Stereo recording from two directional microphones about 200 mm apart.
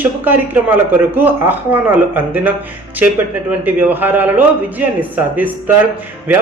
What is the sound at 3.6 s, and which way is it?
A man's voice, 10° right (ahead or behind).